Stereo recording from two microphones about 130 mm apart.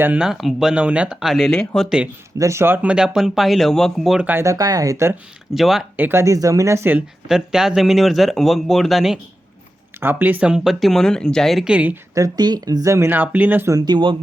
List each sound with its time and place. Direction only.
0.0 s speech: 10° right (ahead or behind)
2.4 s speech: 20° right (ahead or behind); by 4.3 s centre (ahead or behind)
4.3 s speech: 20° right (ahead or behind)
5.5 s speech: centre (ahead or behind)
6.0 s speech: 20° right (ahead or behind)
7.3 s speech: 5° right (ahead or behind)
10.0 s speech: 15° right (ahead or behind)
12.1 s speech: 30° right (ahead or behind)
13.7 s speech: 35° right (ahead or behind)